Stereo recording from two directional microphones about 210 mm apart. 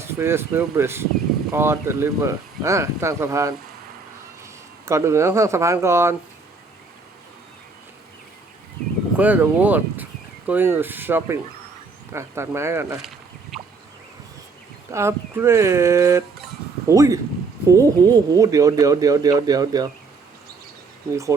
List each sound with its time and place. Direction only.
0.0 s speech: 10° right (ahead or behind)
4.9 s speech: 15° right (ahead or behind)
9.1 s speech: 5° right (ahead or behind)
13.0 s rowboat: centre (ahead or behind)
14.9 s speech: 10° right (ahead or behind)
21.1 s speech: 15° right (ahead or behind)